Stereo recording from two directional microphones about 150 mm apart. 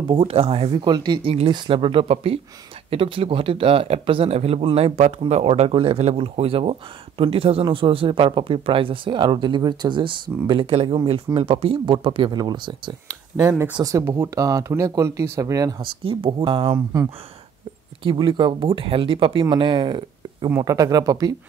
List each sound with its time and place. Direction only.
0.1 s speech: 35° right (ahead or behind)
13.4 s speech: 15° right (ahead or behind)
15.8 s speech: 35° right (ahead or behind)
16.7 s speech: 20° right (ahead or behind)
18.0 s speech: 35° right (ahead or behind)
20.4 s speech: 20° right (ahead or behind)